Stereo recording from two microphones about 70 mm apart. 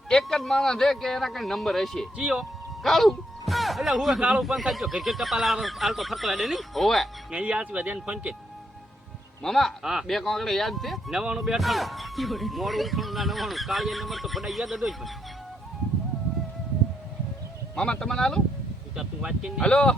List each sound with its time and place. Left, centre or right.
0.1 s speech: centre
2.1 s speech: centre
2.4 s speech: centre
7.3 s speech: centre
9.4 s speech: centre
9.8 s speech: centre
10.2 s speech: centre
17.7 s speech: centre
18.9 s speech: centre
19.5 s speech: centre